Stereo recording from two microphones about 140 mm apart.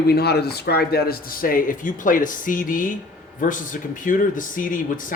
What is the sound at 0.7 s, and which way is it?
Speech, 90° left.